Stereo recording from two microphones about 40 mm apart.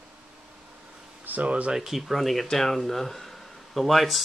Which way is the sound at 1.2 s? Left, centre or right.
Right.